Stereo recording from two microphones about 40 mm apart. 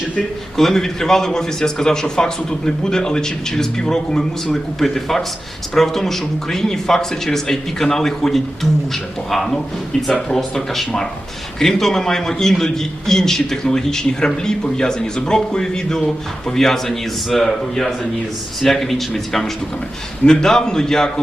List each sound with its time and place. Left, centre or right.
0.5 s a man's voice: centre
10.1 s a man's voice: centre